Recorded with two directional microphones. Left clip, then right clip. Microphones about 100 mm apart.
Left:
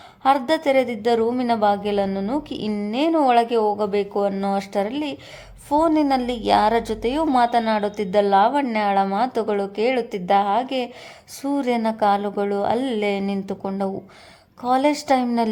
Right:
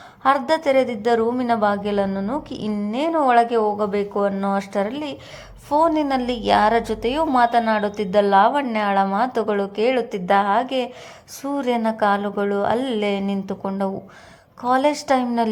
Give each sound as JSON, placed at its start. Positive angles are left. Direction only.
{"t": 0.2, "sound": "a woman's voice", "side_deg": 20}
{"t": 2.0, "sound": "a woman's voice", "side_deg": 35}